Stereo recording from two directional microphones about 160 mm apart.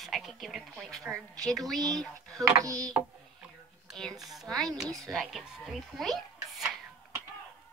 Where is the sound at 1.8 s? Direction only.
25° right (ahead or behind).